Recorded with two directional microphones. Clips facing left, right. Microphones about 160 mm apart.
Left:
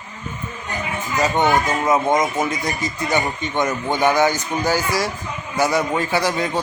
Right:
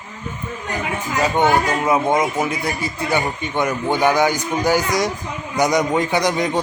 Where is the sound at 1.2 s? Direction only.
10° right (ahead or behind).